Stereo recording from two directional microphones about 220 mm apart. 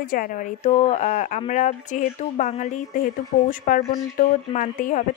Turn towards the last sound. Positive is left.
turn(degrees=35)  # may be behind; listen again after turning